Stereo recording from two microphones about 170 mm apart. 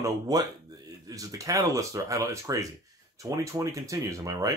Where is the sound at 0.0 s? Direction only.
20° right (ahead or behind).